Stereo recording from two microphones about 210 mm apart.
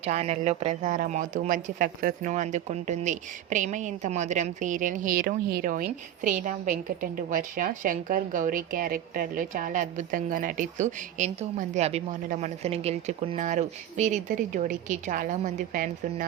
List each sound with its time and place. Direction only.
0.0 s speech: 30° right (ahead or behind)